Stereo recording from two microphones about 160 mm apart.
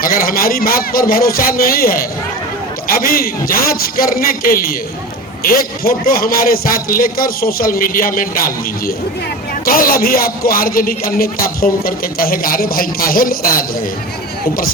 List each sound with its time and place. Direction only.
0.0 s a man's voice: 60° left (ahead or behind)